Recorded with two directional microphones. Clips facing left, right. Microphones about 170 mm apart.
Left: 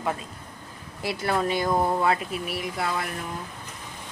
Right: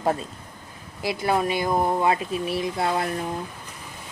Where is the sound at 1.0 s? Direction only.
15° right (ahead or behind); by 3.3 s 30° right (ahead or behind).